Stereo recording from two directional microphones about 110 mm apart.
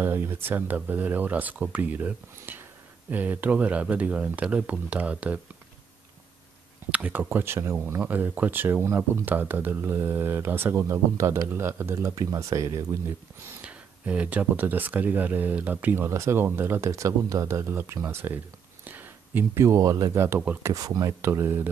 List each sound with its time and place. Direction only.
0.0 s speech: 20° right (ahead or behind)
6.9 s speech: 15° right (ahead or behind); by 12.8 s 30° right (ahead or behind)
13.6 s speech: 10° right (ahead or behind); by 21.1 s 35° right (ahead or behind)
21.2 s speech: 25° right (ahead or behind)